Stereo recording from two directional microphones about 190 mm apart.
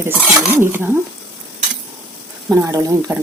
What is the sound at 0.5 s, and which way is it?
Speech, 10° right (ahead or behind).